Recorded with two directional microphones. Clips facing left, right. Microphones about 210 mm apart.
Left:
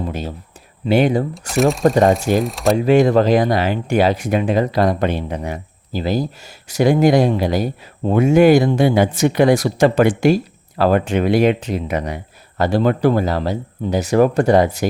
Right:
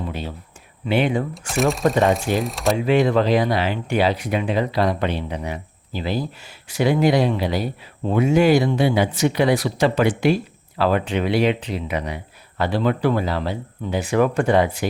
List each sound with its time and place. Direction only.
0.0 s a sound: 40° left (ahead or behind)
0.9 s speech: 40° left (ahead or behind)
1.3 s speech: centre (ahead or behind)
2.7 s speech: 45° left (ahead or behind)